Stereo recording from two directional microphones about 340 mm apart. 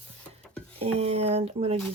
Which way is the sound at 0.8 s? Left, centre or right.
Centre.